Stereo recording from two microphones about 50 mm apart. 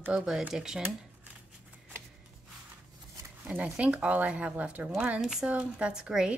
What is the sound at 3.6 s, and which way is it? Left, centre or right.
Speech, right.